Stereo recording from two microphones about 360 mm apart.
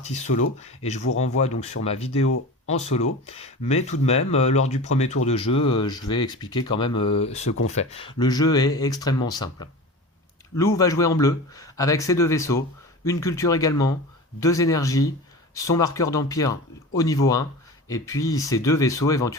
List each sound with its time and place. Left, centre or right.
0.0 s speech: centre